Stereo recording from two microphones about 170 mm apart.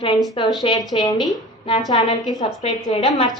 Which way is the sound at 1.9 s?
25° left (ahead or behind).